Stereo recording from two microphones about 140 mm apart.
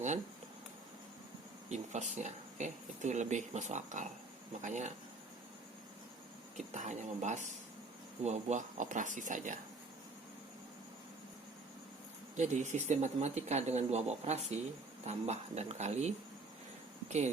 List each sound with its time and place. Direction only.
1.7 s speech: 55° right (ahead or behind)
6.7 s speech: 60° right (ahead or behind)
12.4 s speech: 60° right (ahead or behind)